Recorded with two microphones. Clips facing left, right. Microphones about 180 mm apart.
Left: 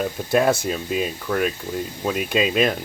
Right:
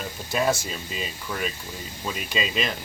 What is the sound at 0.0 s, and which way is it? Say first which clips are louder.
Speech: left 6 dB; 55° left (ahead or behind).